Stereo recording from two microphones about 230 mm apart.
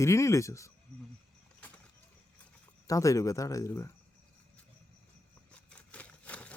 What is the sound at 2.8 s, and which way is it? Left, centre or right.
Speech, centre.